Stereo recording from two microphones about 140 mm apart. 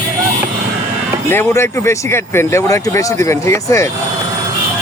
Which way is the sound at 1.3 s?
15° left (ahead or behind).